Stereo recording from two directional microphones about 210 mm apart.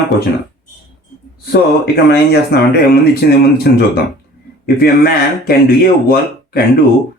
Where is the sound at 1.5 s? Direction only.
50° left (ahead or behind).